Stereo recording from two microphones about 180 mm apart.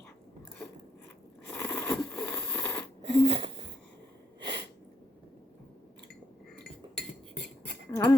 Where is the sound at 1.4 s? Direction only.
10° left (ahead or behind).